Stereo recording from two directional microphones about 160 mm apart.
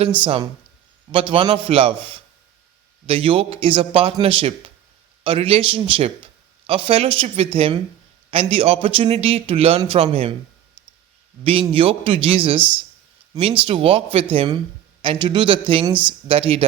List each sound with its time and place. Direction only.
1.1 s a man's voice: 35° right (ahead or behind)
11.7 s a man's voice: 35° right (ahead or behind)
13.7 s a man's voice: 35° right (ahead or behind)